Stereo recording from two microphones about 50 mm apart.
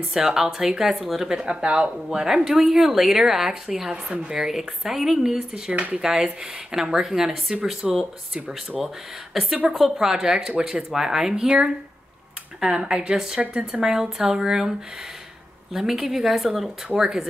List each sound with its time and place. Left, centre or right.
0.1 s a woman's voice: centre
2.1 s a woman's voice: centre
5.5 s speech: right
6.0 s a woman's voice: centre